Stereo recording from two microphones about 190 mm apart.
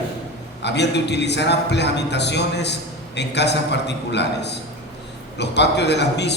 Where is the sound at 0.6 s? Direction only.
65° left (ahead or behind).